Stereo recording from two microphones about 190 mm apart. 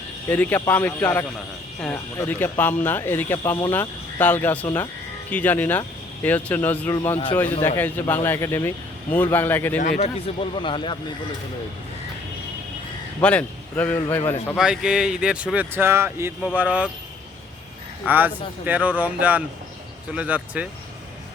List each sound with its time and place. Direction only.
0.3 s speech: 10° left (ahead or behind)
10.0 s speech: 30° left (ahead or behind)
13.2 s speech: 10° left (ahead or behind)
14.6 s speech: 5° right (ahead or behind)
18.0 s speech: 10° right (ahead or behind)